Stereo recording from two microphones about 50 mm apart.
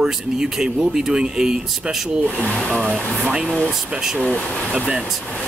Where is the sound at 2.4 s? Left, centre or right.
Centre.